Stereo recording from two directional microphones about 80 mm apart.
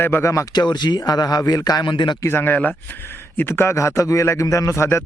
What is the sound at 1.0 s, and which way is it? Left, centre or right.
Speech, left.